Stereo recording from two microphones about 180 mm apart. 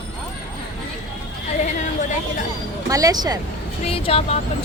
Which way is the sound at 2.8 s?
20° right (ahead or behind).